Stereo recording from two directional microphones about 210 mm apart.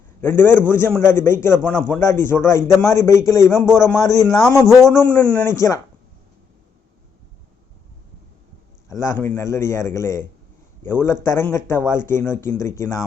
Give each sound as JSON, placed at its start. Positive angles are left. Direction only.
{"t": 0.2, "sound": "a man's voice", "side_deg": 10}
{"t": 4.6, "sound": "a man's voice", "side_deg": 0}
{"t": 4.9, "sound": "a man's voice", "side_deg": 10}
{"t": 8.9, "sound": "a man's voice", "side_deg": 15}